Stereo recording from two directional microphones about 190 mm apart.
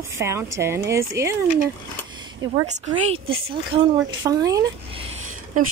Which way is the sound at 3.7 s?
25° right (ahead or behind).